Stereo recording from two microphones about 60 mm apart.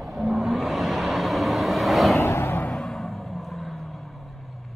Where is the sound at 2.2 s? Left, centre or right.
Left.